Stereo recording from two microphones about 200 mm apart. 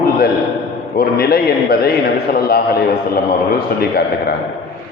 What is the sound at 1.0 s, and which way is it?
A man's voice, 50° left (ahead or behind).